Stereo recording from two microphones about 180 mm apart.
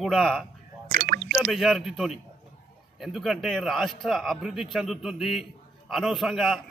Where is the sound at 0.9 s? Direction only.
55° right (ahead or behind).